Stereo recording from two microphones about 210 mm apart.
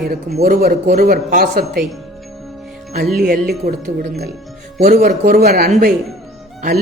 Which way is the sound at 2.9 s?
45° right (ahead or behind).